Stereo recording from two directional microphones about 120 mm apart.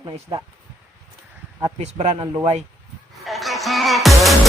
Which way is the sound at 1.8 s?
65° right (ahead or behind).